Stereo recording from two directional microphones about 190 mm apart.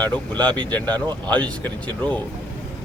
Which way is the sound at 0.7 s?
10° left (ahead or behind).